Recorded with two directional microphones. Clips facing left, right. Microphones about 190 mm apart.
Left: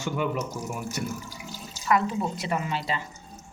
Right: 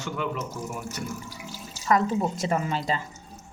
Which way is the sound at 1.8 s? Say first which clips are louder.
Right 2 dB; 35° right (ahead or behind).